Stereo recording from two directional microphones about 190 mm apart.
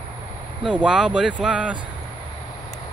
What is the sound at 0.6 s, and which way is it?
Speech, 5° right (ahead or behind).